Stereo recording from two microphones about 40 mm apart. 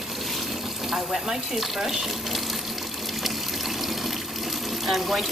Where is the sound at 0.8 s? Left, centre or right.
Centre.